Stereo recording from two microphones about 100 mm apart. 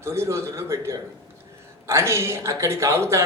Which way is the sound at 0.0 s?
25° right (ahead or behind).